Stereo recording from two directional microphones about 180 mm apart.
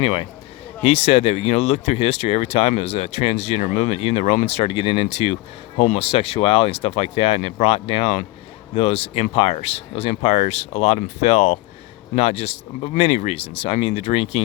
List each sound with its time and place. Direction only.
0.0 s speech: 30° left (ahead or behind)